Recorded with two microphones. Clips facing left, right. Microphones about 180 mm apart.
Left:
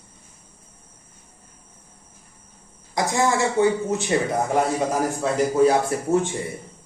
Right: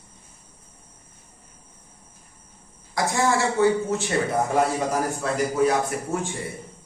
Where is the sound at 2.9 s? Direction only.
20° left (ahead or behind).